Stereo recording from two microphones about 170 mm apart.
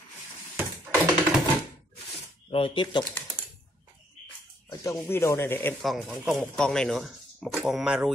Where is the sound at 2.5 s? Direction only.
30° left (ahead or behind).